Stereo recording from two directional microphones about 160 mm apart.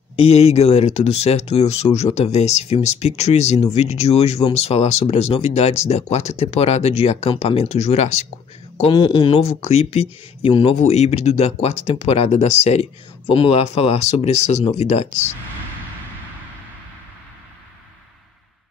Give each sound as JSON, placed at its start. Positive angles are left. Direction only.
{"t": 0.1, "sound": "speech", "side_deg": 40}
{"t": 8.7, "sound": "speech", "side_deg": 30}